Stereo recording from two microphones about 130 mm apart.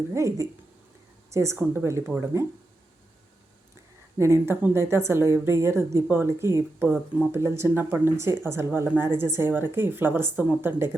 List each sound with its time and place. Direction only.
0.1 s a woman's voice: 25° right (ahead or behind)
4.2 s a woman's voice: 20° right (ahead or behind)